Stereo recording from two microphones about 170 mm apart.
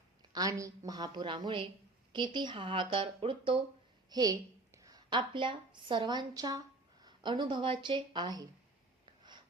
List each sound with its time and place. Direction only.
0.2 s a woman's voice: 20° right (ahead or behind)